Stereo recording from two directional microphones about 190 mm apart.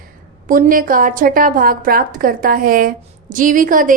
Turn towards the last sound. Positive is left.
turn(degrees=-45)  # may be behind; listen again after turning